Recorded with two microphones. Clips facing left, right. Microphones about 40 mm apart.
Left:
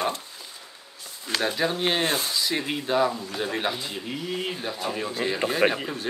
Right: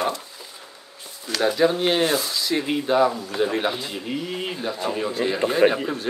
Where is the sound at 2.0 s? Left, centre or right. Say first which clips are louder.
Right 3 dB; left.